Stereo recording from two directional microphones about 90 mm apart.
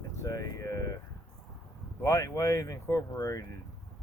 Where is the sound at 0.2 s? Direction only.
40° left (ahead or behind).